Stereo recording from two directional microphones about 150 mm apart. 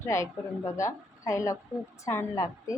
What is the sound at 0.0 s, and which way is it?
Speech, 20° left (ahead or behind).